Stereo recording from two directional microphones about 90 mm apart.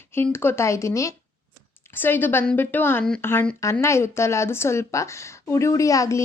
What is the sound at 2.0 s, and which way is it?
A woman's voice, 20° left (ahead or behind).